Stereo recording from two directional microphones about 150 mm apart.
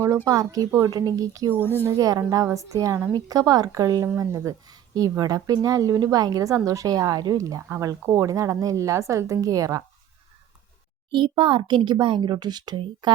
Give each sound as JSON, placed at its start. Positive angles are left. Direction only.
{"t": 0.3, "sound": "speech", "side_deg": -25}
{"t": 11.1, "sound": "a woman's voice", "side_deg": -35}